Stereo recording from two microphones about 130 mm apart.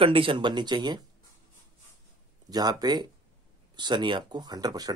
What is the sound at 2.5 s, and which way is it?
Speech, 30° right (ahead or behind).